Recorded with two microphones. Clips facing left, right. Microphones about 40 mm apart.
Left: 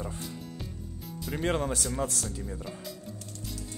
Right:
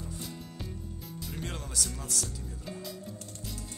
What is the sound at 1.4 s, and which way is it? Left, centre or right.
Speech, left.